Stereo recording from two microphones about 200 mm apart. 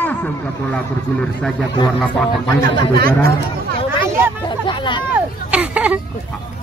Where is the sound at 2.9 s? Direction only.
50° right (ahead or behind).